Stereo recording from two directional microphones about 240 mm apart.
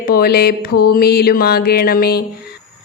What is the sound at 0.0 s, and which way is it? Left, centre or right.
Speech, left.